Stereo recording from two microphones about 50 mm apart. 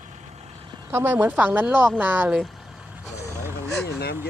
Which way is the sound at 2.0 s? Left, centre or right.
Right.